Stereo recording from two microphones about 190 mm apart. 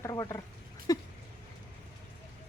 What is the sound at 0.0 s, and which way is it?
Speech, 20° left (ahead or behind).